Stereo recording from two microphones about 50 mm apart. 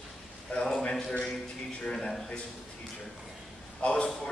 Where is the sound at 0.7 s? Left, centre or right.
Centre.